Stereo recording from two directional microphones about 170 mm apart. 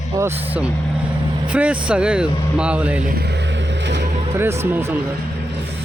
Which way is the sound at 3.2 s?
85° right.